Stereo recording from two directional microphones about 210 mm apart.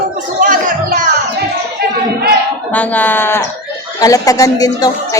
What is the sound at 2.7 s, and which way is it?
A woman's voice, 10° left (ahead or behind).